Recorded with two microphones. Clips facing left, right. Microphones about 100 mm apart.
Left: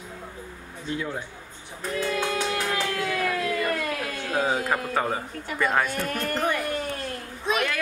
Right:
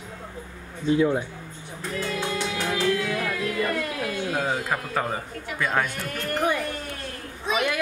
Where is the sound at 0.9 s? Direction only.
20° right (ahead or behind).